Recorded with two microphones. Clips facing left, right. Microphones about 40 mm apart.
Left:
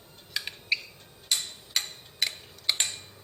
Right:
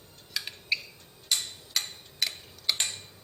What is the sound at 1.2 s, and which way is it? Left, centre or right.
Tick-tock, centre.